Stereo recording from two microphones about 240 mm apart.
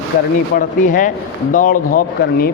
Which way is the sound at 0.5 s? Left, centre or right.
Left.